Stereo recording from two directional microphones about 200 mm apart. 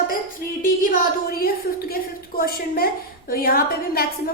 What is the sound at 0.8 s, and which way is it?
A woman's voice, 45° left (ahead or behind).